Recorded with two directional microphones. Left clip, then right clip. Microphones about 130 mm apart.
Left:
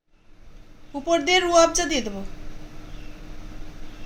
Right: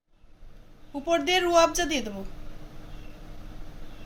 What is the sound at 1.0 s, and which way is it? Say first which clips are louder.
A woman's voice: left 4 dB; 45° left (ahead or behind).